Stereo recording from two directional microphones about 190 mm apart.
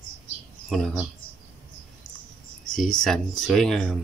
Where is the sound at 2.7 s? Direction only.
5° left (ahead or behind).